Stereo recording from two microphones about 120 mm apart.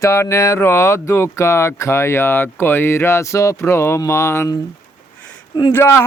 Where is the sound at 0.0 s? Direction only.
25° left (ahead or behind).